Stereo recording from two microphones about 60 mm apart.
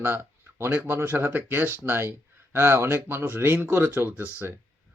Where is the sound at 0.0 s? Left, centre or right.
Right.